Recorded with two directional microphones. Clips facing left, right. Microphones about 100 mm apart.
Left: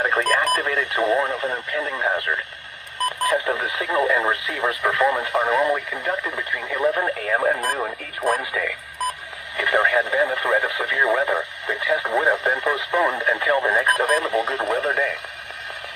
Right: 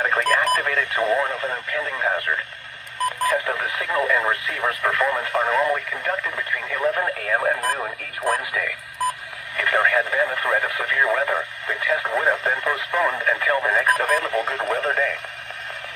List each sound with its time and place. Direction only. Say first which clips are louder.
0.0 s radio: even; 30° left (ahead or behind)
0.5 s speech: even; 25° left (ahead or behind)
3.2 s speech: left 3 dB; 20° left (ahead or behind)